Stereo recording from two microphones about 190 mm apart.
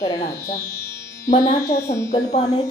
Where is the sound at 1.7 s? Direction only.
15° left (ahead or behind).